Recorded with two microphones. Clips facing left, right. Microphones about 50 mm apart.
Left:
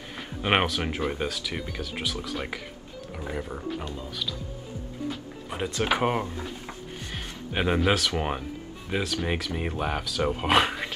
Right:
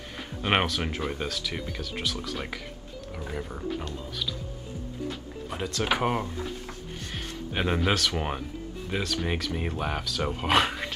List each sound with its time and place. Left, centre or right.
0.4 s speech: centre
5.0 s music: centre
5.9 s speech: centre
7.5 s speech: centre